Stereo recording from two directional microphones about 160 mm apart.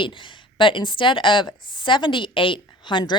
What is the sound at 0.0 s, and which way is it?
A woman's voice, 30° left (ahead or behind).